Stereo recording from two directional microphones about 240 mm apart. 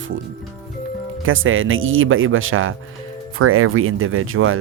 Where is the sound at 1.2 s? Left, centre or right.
Right.